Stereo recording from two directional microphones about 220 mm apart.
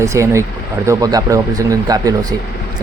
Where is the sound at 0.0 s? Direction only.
15° right (ahead or behind).